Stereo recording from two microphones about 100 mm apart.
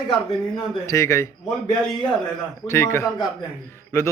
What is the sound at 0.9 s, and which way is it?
Speech, 30° left (ahead or behind).